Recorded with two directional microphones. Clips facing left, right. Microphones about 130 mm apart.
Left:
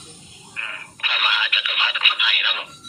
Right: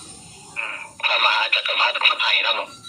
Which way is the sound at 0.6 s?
40° right (ahead or behind).